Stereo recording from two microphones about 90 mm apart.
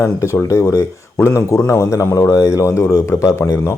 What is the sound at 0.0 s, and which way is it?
A man's voice, 30° left (ahead or behind).